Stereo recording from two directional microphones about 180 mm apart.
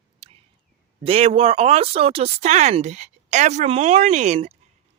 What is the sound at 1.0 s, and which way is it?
Speech, 30° right (ahead or behind).